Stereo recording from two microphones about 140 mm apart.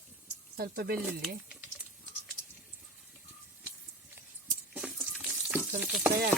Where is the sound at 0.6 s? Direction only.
90° right.